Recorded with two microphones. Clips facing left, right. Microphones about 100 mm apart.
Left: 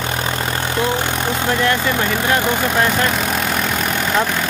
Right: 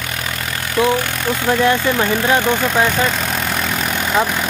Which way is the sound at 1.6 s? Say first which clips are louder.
Right 4 dB; 15° right (ahead or behind).